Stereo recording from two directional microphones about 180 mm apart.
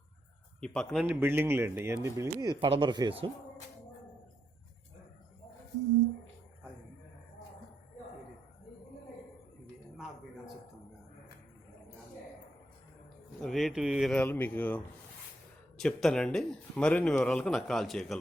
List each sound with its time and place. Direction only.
0.6 s speech: 5° left (ahead or behind)
1.0 s speech: 10° right (ahead or behind)
13.4 s speech: centre (ahead or behind)
15.8 s speech: 5° left (ahead or behind)